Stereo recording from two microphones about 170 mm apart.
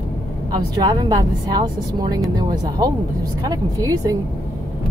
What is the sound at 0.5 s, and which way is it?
Speech, 25° right (ahead or behind).